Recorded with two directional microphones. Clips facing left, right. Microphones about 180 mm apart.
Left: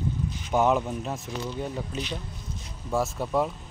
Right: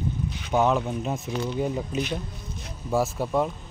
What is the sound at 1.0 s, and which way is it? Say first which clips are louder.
Speech: right 4 dB; 10° right (ahead or behind).